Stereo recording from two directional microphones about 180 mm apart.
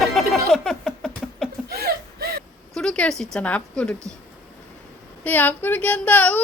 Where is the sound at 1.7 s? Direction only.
60° right (ahead or behind).